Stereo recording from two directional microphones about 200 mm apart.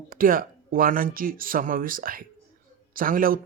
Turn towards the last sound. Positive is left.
turn(degrees=-45)  # may be behind; listen again after turning